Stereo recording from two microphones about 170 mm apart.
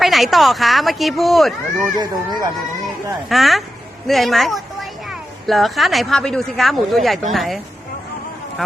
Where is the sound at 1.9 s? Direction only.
25° right (ahead or behind).